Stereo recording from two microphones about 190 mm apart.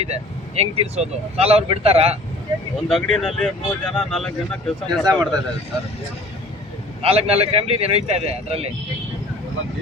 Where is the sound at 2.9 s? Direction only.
Centre (ahead or behind).